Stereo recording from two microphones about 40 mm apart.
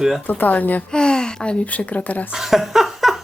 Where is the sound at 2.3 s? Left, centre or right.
Centre.